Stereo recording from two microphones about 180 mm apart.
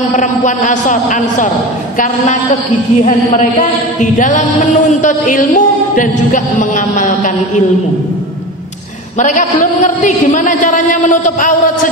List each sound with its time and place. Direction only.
0.1 s music: 45° left (ahead or behind)
2.0 s a woman's voice: 40° left (ahead or behind)
4.0 s music: 45° left (ahead or behind)
9.2 s music: 45° left (ahead or behind)